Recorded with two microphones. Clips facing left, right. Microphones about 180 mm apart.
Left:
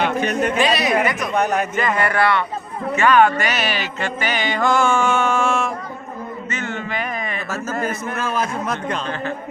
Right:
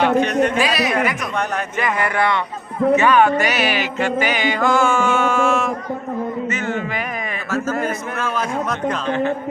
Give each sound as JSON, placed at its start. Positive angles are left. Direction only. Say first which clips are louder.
{"t": 0.2, "sound": "speech", "louder": "right 3 dB", "side_deg": 5}
{"t": 0.6, "sound": "a sound", "louder": "left 1 dB", "side_deg": 0}
{"t": 1.8, "sound": "music", "louder": "right 1 dB", "side_deg": -15}
{"t": 9.0, "sound": "a woman's voice", "louder": "right 7 dB", "side_deg": -20}